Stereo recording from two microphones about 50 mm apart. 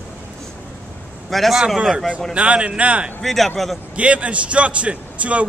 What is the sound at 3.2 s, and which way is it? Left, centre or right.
Speech, centre.